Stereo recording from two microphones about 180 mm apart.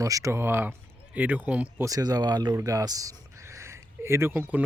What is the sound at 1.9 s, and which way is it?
Speech, 20° right (ahead or behind).